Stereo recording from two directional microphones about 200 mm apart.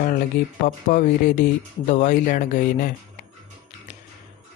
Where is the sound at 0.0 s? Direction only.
45° left (ahead or behind).